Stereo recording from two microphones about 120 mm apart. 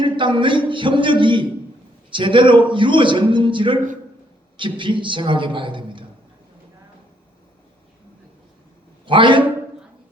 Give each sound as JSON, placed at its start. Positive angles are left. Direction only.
{"t": 0.0, "sound": "a man's voice", "side_deg": -45}
{"t": 9.0, "sound": "a man's voice", "side_deg": -45}